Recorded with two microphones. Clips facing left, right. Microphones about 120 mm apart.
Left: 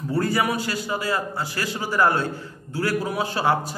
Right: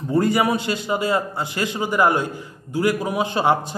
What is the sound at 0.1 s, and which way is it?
A man's voice, 20° right (ahead or behind).